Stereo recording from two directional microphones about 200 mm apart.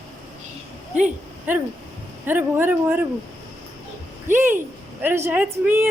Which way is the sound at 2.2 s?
10° right (ahead or behind).